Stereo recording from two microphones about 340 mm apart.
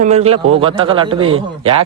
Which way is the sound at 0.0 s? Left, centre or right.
Centre.